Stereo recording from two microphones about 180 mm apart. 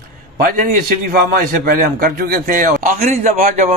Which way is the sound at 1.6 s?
55° right (ahead or behind).